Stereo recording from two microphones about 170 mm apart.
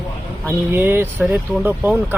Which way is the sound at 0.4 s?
15° right (ahead or behind).